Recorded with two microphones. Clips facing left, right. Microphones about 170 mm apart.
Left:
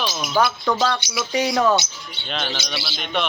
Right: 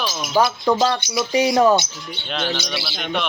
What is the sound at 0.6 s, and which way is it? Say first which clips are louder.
Speech: right 3 dB; 25° right (ahead or behind).